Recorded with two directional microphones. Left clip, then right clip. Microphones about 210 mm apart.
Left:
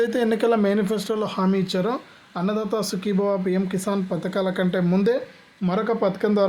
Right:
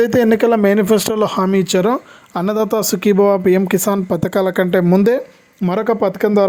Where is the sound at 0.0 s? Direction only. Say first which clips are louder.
Right 8 dB; 40° right (ahead or behind).